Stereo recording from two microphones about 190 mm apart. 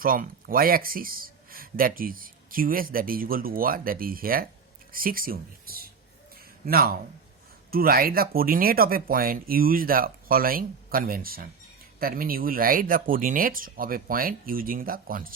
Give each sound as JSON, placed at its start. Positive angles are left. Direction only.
{"t": 0.0, "sound": "speech", "side_deg": -50}
{"t": 6.3, "sound": "a sound", "side_deg": -50}
{"t": 7.7, "sound": "speech", "side_deg": -50}